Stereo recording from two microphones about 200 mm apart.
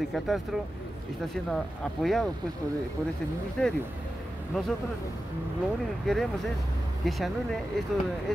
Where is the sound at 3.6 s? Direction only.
5° left (ahead or behind).